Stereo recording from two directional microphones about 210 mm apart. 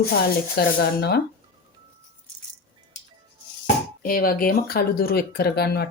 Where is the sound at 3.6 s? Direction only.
40° left (ahead or behind).